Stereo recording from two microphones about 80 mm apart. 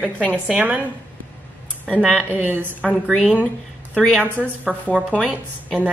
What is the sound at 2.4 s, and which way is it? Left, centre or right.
Speech, right.